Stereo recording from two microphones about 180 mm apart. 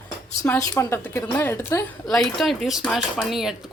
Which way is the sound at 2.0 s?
Centre (ahead or behind).